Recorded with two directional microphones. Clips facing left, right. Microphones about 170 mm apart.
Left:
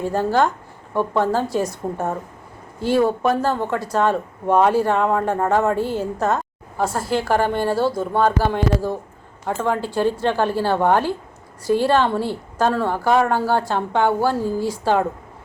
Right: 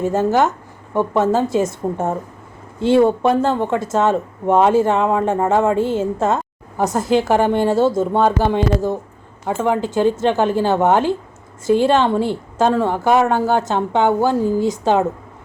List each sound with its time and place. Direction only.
0.0 s a woman's voice: 20° right (ahead or behind)